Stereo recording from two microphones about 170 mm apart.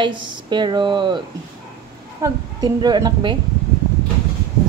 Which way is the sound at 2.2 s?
25° right (ahead or behind).